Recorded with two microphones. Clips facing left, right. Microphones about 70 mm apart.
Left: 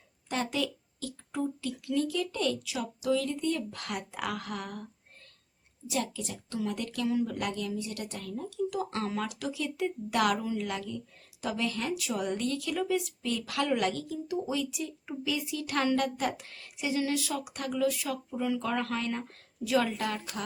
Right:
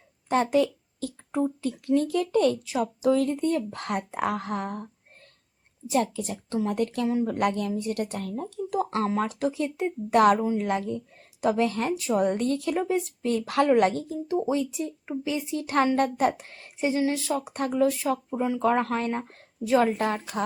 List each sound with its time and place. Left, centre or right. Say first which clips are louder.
0.3 s speech: right 9 dB; right
5.9 s speech: right 8 dB; right